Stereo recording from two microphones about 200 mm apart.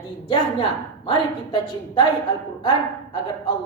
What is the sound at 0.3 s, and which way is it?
A woman's voice, 25° left (ahead or behind).